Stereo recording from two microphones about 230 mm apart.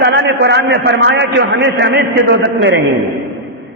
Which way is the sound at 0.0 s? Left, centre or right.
Right.